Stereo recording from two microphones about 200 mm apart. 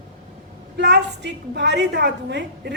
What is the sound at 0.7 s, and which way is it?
A woman's voice, 60° right (ahead or behind).